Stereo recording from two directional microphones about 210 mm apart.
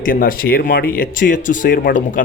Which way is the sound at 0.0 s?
40° left (ahead or behind).